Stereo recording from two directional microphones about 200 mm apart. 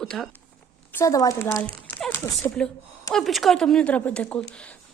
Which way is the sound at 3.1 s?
Centre (ahead or behind).